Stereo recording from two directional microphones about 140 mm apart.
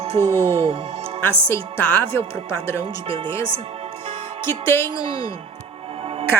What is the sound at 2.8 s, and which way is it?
Speech, 40° right (ahead or behind).